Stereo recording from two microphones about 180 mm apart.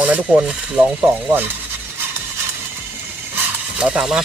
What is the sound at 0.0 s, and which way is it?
Speech, 10° right (ahead or behind).